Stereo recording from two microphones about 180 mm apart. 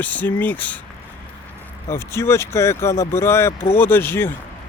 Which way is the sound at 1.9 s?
15° left (ahead or behind).